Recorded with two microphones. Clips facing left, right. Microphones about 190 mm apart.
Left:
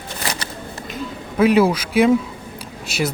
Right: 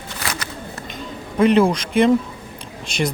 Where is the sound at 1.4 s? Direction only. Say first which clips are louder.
Even; 5° left (ahead or behind).